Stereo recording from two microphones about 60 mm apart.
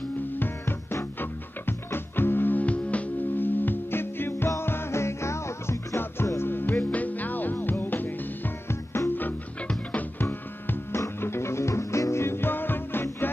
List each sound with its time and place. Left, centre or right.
1.2 s music: left
8.6 s music: left
11.1 s music: left